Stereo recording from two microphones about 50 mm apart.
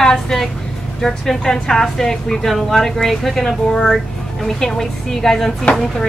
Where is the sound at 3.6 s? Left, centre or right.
Centre.